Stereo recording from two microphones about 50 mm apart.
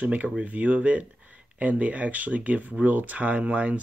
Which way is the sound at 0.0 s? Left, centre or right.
Right.